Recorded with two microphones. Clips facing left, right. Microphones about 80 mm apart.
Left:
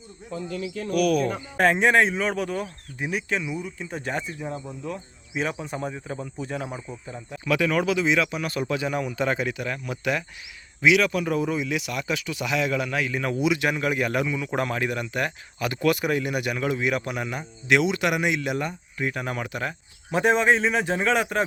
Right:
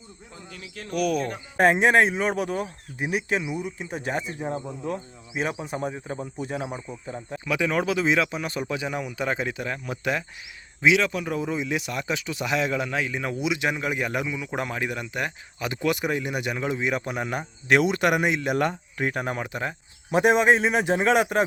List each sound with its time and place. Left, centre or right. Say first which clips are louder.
0.9 s speech: left 3 dB; right
4.4 s speech: right 3 dB; right
5.4 s speech: even; centre
7.3 s speech: left 2 dB; centre
7.9 s speech: even; right
17.2 s speech: right 1 dB; right; by 21.4 s centre